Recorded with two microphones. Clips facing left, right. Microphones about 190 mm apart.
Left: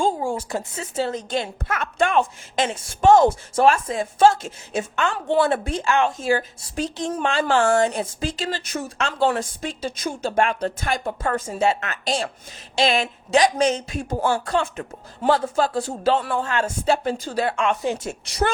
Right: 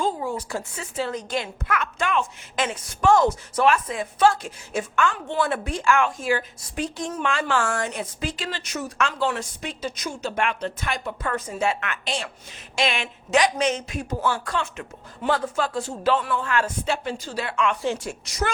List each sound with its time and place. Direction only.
0.0 s a woman's voice: 30° left (ahead or behind)
6.9 s a woman's voice: 25° left (ahead or behind)
8.0 s speech: 40° left (ahead or behind)
11.5 s speech: 25° left (ahead or behind); by 17.7 s 45° left (ahead or behind)
17.7 s a woman's voice: 20° left (ahead or behind)